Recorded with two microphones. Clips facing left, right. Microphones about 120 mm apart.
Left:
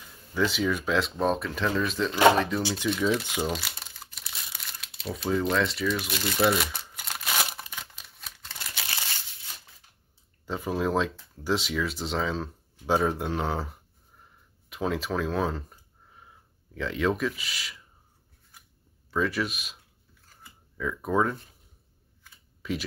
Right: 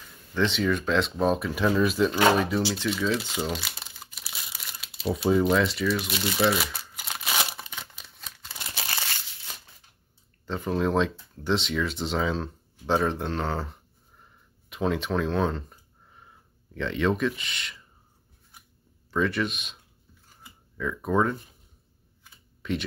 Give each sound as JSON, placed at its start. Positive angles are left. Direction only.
{"t": 0.3, "sound": "speech", "side_deg": 5}
{"t": 2.8, "sound": "speech", "side_deg": 5}
{"t": 3.3, "sound": "crumpling", "side_deg": 0}
{"t": 5.0, "sound": "speech", "side_deg": -25}
{"t": 5.4, "sound": "crumpling", "side_deg": -5}
{"t": 10.4, "sound": "speech", "side_deg": 5}
{"t": 19.0, "sound": "speech", "side_deg": 0}
{"t": 22.6, "sound": "computer keyboard", "side_deg": 5}